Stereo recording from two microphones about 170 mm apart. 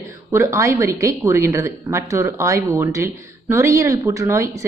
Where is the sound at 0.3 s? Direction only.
15° right (ahead or behind).